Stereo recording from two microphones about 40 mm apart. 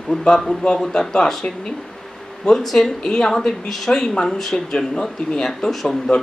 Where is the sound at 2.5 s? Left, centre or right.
Centre.